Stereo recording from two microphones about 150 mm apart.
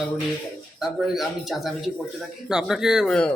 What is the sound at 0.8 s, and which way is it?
A man's voice, centre (ahead or behind).